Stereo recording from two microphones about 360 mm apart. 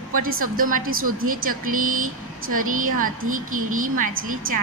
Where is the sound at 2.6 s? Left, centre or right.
Right.